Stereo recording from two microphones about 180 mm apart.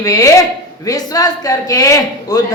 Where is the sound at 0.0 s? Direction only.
20° left (ahead or behind).